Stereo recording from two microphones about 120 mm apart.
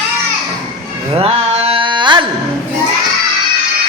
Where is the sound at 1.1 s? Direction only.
50° right (ahead or behind).